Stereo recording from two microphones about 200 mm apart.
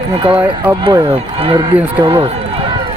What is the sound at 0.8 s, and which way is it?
Speech, 25° right (ahead or behind).